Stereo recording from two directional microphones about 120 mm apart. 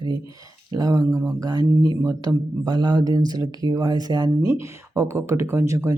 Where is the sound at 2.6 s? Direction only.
35° right (ahead or behind).